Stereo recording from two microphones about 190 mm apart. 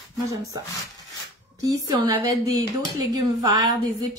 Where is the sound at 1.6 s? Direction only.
20° right (ahead or behind).